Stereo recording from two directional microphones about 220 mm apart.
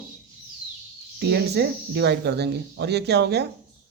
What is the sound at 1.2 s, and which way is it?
Speech, 50° right (ahead or behind).